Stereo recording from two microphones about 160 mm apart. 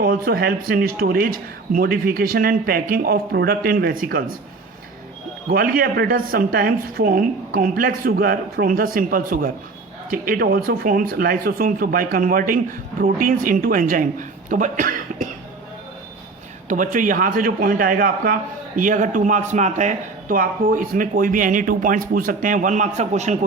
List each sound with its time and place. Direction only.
0.0 s speech: 65° right (ahead or behind)
5.5 s speech: 65° right (ahead or behind)
16.6 s speech: 55° right (ahead or behind)